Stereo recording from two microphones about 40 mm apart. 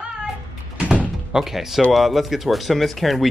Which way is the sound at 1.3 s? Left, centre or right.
Centre.